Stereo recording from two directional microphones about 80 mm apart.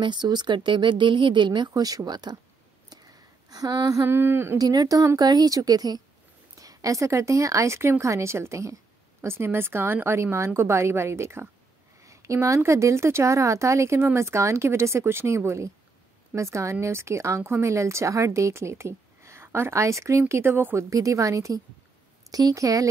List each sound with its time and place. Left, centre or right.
0.0 s speech: right
1.7 s speech: right
2.9 s a sound: right
4.0 s speech: right
4.6 s a woman's voice: right
20.9 s speech: right